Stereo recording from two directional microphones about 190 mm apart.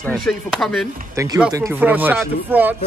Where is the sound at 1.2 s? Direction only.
15° right (ahead or behind).